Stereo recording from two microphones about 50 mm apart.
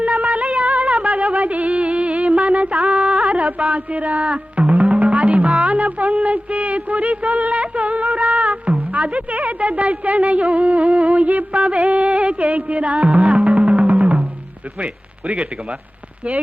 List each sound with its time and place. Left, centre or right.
0.0 s a sound: right
3.0 s music: right
8.9 s a woman's voice: right
11.7 s music: right